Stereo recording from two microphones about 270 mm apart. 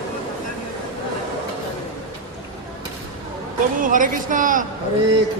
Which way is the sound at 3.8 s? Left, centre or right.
Right.